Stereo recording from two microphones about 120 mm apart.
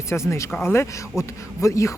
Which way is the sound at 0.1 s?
25° left (ahead or behind).